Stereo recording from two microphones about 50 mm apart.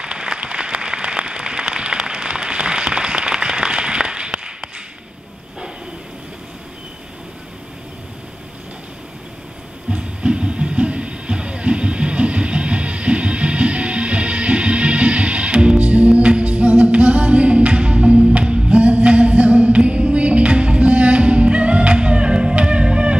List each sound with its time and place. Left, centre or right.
0.0 s applause: centre
9.8 s music: centre